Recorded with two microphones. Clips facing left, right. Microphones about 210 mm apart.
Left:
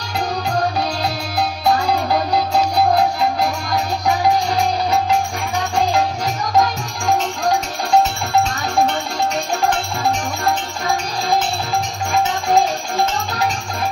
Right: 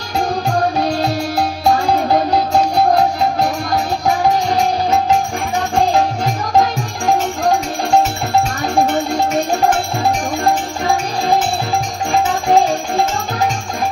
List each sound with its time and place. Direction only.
1.6 s music: 45° right (ahead or behind)